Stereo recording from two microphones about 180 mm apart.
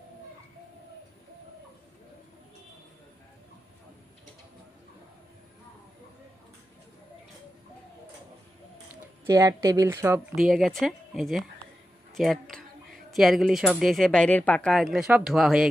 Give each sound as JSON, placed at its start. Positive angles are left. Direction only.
{"t": 9.2, "sound": "a woman's voice", "side_deg": -20}
{"t": 10.3, "sound": "speech", "side_deg": 0}